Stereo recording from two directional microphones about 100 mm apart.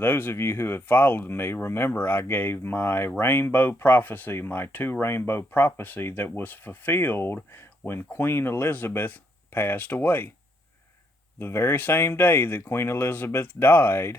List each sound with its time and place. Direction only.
0.0 s speech: 20° left (ahead or behind)
11.3 s speech: 25° left (ahead or behind)